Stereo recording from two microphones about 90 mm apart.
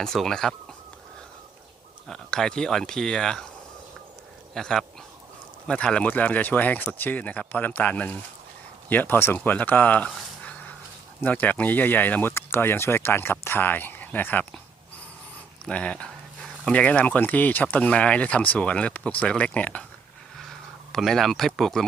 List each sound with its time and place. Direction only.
0.0 s speech: 5° left (ahead or behind)
2.0 s speech: 5° left (ahead or behind)
4.5 s speech: 5° left (ahead or behind)
10.4 s dog: 15° left (ahead or behind)
11.2 s speech: 20° left (ahead or behind)
15.6 s speech: 10° left (ahead or behind)
20.4 s speech: centre (ahead or behind)